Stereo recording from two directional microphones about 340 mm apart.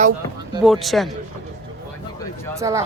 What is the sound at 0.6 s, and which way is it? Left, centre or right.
Speech, centre.